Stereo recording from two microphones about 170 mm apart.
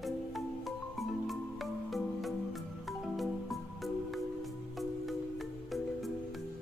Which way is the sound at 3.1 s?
Centre (ahead or behind).